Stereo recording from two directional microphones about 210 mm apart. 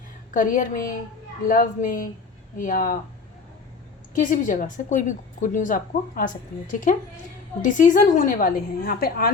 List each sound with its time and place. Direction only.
0.3 s a woman's voice: 40° left (ahead or behind)
4.1 s a woman's voice: 35° left (ahead or behind)